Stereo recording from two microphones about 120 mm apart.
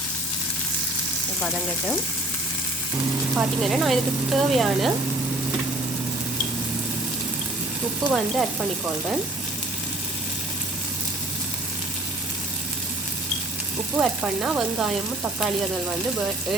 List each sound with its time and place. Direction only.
3.3 s speech: centre (ahead or behind)
8.0 s frying: 35° right (ahead or behind)
13.9 s speech: 5° right (ahead or behind)